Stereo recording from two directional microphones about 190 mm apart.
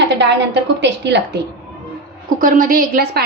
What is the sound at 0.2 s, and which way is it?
A woman's voice, 65° right (ahead or behind).